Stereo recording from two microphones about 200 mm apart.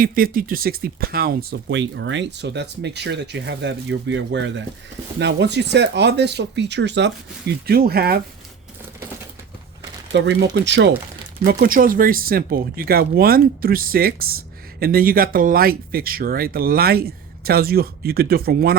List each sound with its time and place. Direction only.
0.0 s speech: 45° right (ahead or behind)
10.1 s speech: 60° right (ahead or behind)
11.4 s speech: 45° right (ahead or behind)